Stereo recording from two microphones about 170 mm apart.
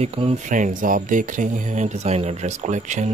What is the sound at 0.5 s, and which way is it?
Speech, 50° right (ahead or behind).